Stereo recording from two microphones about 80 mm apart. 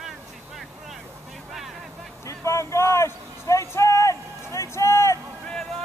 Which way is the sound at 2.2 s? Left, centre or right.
Left.